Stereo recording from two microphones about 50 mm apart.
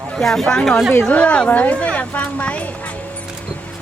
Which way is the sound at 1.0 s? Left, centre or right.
Left.